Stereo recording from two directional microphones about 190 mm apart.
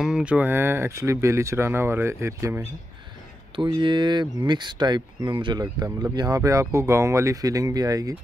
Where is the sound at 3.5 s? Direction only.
25° right (ahead or behind).